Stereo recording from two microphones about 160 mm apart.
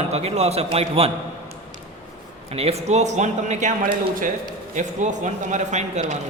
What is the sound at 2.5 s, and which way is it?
Speech, 40° right (ahead or behind).